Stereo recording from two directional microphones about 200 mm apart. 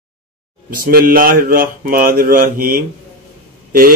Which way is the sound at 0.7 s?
45° right (ahead or behind).